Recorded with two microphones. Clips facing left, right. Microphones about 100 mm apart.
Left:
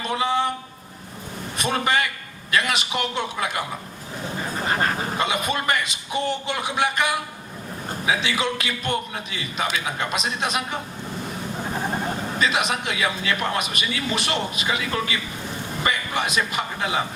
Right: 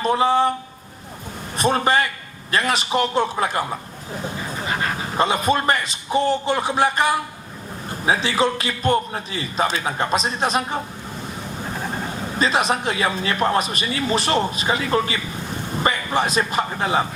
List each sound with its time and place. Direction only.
0.0 s a man's voice: 35° right (ahead or behind)
1.5 s a man's voice: 35° right (ahead or behind)
5.1 s a man's voice: 35° right (ahead or behind)
12.4 s a man's voice: 35° right (ahead or behind)